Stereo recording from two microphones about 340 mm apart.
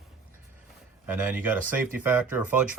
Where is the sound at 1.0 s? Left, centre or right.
Centre.